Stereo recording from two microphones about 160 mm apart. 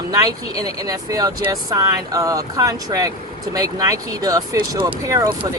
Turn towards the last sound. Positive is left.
turn(degrees=-20)  # may be behind; listen again after turning